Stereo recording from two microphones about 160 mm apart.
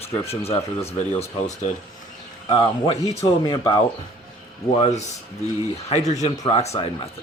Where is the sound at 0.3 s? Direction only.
40° left (ahead or behind).